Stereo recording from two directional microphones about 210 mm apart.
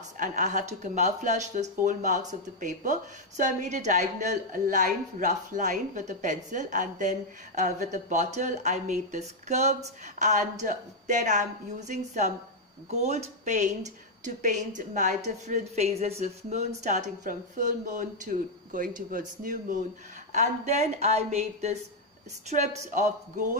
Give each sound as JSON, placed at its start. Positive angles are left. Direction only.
{"t": 0.2, "sound": "speech", "side_deg": -35}